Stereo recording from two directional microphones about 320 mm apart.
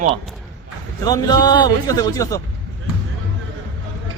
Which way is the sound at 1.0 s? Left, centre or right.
Centre.